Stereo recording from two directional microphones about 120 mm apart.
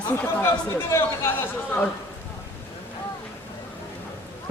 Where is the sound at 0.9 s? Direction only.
20° left (ahead or behind).